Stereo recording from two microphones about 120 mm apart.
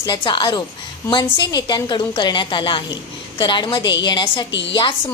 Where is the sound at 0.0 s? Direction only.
40° left (ahead or behind).